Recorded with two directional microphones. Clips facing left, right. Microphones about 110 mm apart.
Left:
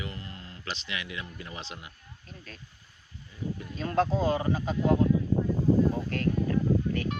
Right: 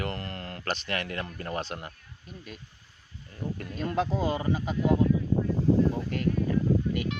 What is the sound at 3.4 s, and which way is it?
Speech, 65° right (ahead or behind).